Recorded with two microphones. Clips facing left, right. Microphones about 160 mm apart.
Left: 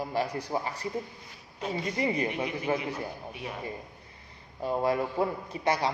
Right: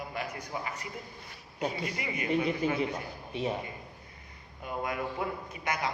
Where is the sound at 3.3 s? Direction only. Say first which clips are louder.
Right 7 dB; 25° right (ahead or behind).